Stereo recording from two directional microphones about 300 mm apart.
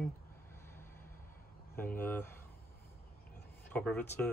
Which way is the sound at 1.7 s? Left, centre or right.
Centre.